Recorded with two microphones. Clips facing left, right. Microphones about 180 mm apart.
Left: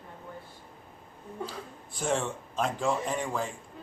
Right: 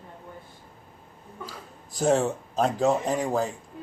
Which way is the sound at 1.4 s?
40° right (ahead or behind).